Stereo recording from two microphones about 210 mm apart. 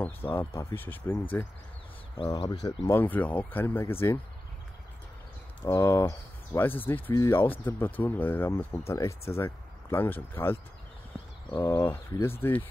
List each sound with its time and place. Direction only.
0.0 s speech: 10° left (ahead or behind)
2.1 s speech: 25° left (ahead or behind)
2.9 s speech: 10° left (ahead or behind)
5.6 s speech: 10° left (ahead or behind)